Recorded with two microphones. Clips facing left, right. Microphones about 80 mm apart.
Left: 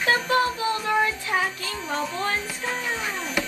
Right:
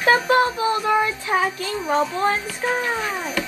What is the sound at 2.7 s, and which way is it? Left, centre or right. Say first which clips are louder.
Music: right 7 dB; right.